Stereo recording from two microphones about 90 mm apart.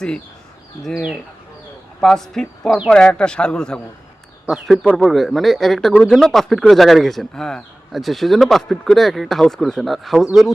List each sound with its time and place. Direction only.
0.8 s a man's voice: 5° left (ahead or behind)